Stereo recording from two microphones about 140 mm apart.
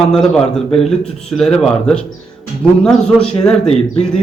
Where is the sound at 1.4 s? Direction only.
5° left (ahead or behind).